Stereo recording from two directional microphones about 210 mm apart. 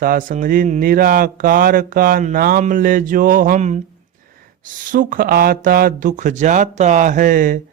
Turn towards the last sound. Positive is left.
turn(degrees=-40)  # may be behind; listen again after turning